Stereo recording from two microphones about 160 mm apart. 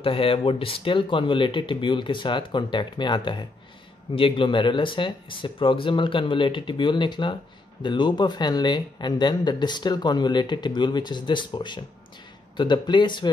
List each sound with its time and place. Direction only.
0.0 s speech: 35° left (ahead or behind)